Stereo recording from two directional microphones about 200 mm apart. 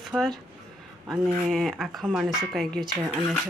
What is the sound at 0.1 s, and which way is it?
Speech, centre (ahead or behind).